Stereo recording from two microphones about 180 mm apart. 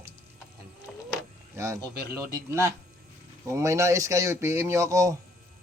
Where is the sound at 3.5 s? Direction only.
15° right (ahead or behind).